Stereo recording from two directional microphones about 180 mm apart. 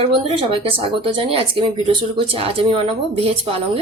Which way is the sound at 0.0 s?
30° right (ahead or behind).